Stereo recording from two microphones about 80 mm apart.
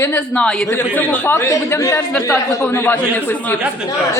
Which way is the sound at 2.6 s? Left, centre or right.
Left.